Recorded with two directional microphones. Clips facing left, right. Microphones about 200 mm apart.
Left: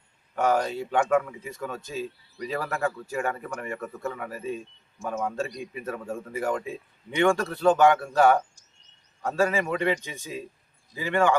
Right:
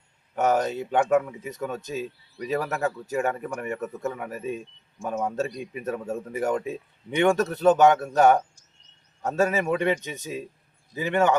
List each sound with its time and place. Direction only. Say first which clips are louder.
0.3 s a man's voice: right 1 dB; 20° right (ahead or behind)